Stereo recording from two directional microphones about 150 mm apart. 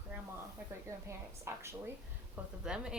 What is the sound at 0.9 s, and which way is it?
Speech, 20° right (ahead or behind).